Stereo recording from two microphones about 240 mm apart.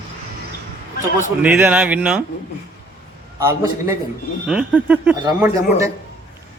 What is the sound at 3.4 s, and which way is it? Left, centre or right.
Speech, centre.